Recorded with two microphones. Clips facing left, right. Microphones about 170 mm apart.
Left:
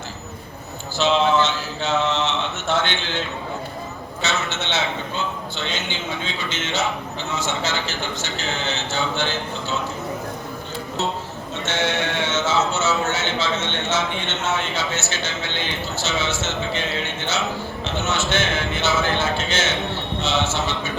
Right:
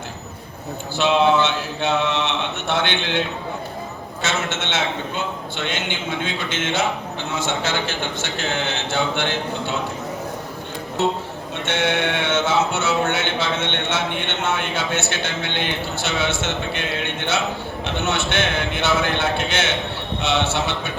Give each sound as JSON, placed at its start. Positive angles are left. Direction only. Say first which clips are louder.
{"t": 0.9, "sound": "a man's voice", "louder": "right 1 dB", "side_deg": -60}
{"t": 4.2, "sound": "a man's voice", "louder": "right 1 dB", "side_deg": -50}
{"t": 11.5, "sound": "speech", "louder": "right 2 dB", "side_deg": -60}